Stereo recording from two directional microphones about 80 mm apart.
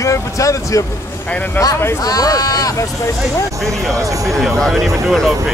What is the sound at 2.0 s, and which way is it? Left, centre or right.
Speech, left.